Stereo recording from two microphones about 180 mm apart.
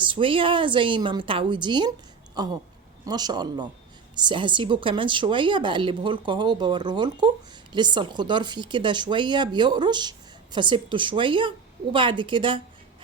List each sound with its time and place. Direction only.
0.0 s a woman's voice: 30° right (ahead or behind)